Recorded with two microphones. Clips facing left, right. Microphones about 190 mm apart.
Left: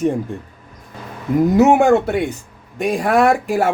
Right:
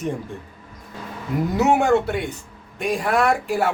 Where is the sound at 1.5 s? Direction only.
50° left (ahead or behind).